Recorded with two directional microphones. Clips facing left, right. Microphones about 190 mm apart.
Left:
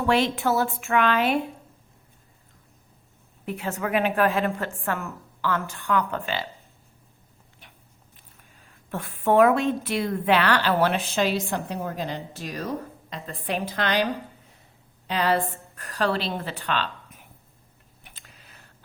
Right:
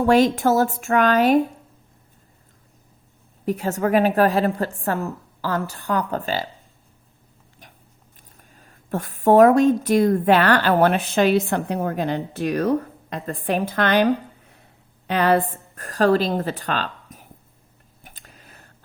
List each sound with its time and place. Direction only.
0.0 s a woman's voice: 40° right (ahead or behind)
3.4 s a woman's voice: 40° right (ahead or behind)
8.4 s a woman's voice: 45° right (ahead or behind)
18.0 s a sound: 45° right (ahead or behind)